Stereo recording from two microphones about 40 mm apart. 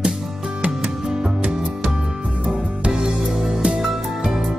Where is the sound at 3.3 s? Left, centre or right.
Centre.